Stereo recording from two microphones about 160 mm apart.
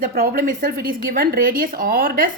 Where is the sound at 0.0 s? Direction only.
70° right (ahead or behind).